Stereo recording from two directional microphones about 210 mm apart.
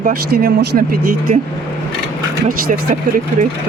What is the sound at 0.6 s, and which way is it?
Speech, 45° right (ahead or behind).